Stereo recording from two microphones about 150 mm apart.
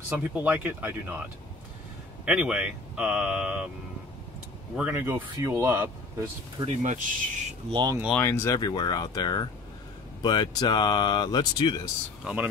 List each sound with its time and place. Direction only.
0.1 s speech: 10° right (ahead or behind)
2.2 s speech: 5° right (ahead or behind)
4.7 s speech: 15° right (ahead or behind)
6.6 s speech: 50° right (ahead or behind)
7.7 s speech: 25° right (ahead or behind)
8.1 s speech: 15° left (ahead or behind)